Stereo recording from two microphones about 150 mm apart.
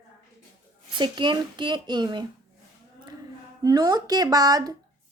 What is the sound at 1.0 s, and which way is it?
Speech, 30° right (ahead or behind).